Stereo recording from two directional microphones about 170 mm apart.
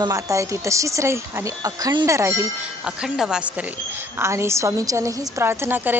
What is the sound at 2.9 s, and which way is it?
A woman's voice, 5° right (ahead or behind).